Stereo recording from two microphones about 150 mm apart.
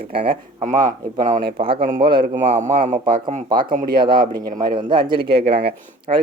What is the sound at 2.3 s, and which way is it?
A man's voice, 55° right (ahead or behind).